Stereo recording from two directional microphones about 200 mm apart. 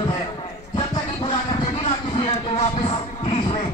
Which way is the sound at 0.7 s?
25° left (ahead or behind).